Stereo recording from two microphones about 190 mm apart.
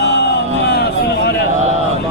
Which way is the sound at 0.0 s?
65° left (ahead or behind).